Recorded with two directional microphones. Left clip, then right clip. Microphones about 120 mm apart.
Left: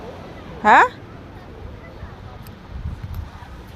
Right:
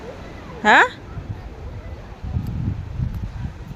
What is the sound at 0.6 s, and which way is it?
Speech, 25° right (ahead or behind).